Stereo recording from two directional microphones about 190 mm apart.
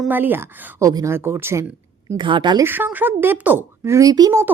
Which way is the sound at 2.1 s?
25° right (ahead or behind).